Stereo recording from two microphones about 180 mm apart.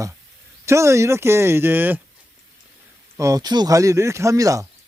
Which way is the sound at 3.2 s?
20° right (ahead or behind).